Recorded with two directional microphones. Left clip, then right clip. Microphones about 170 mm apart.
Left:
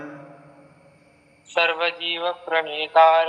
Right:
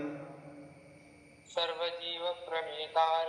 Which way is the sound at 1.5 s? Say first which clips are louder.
Left 13 dB; 40° left (ahead or behind).